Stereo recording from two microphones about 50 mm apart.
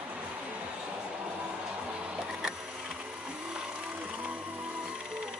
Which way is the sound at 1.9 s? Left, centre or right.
Centre.